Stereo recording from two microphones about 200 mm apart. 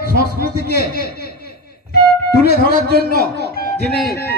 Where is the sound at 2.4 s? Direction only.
50° left (ahead or behind).